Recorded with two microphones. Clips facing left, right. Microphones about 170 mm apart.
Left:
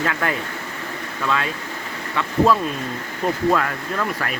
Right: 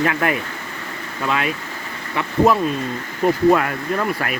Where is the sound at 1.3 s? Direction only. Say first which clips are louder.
Right 2 dB; 15° right (ahead or behind).